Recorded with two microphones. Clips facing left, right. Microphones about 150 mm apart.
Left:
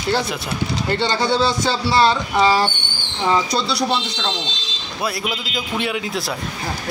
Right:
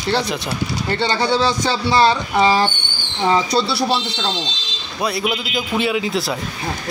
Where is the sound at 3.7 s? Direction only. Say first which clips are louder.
Right 1 dB; 30° right (ahead or behind).